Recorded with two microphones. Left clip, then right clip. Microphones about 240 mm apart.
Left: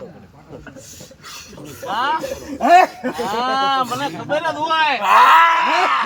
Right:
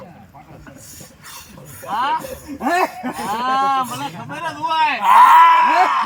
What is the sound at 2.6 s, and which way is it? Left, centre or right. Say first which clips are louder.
Groan: left 7 dB; centre.